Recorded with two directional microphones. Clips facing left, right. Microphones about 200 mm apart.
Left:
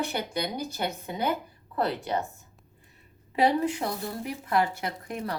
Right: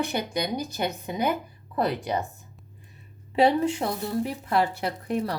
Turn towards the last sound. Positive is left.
turn(degrees=-35)  # may be behind; listen again after turning